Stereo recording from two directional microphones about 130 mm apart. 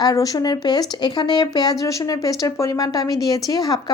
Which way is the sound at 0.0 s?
30° left (ahead or behind).